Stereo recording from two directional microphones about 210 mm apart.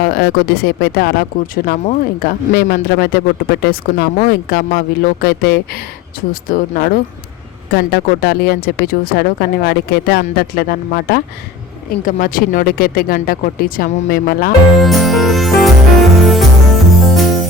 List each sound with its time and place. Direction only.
0.0 s speech: 45° left (ahead or behind)
14.8 s music: centre (ahead or behind)